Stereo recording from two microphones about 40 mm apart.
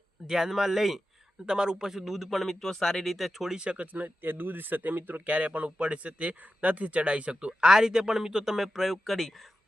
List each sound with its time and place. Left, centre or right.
0.3 s a man's voice: centre
1.5 s speech: centre
3.5 s speech: right
3.8 s speech: right
4.2 s speech: right
7.3 s a man's voice: centre